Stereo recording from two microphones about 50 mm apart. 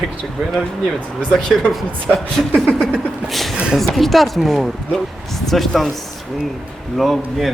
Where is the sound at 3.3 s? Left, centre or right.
Centre.